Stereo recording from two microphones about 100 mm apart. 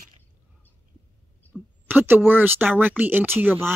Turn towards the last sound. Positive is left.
turn(degrees=-20)  # may be behind; listen again after turning